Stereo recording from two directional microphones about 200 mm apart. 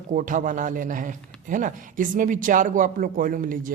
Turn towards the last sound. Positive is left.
turn(degrees=-45)  # may be behind; listen again after turning